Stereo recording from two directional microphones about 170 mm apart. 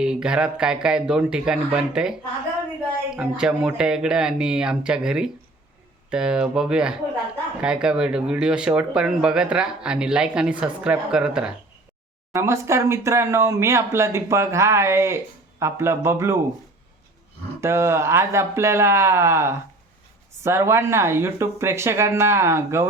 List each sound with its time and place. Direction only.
0.0 s speech: 5° right (ahead or behind)
3.2 s speech: 5° right (ahead or behind)
12.3 s speech: 15° right (ahead or behind)
17.6 s speech: 15° right (ahead or behind)